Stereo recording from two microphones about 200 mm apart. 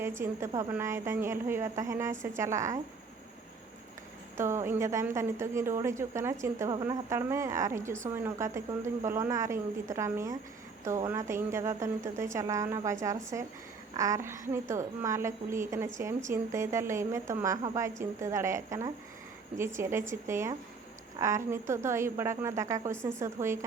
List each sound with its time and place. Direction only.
0.0 s a woman's voice: 15° right (ahead or behind)
4.4 s a woman's voice: 15° right (ahead or behind)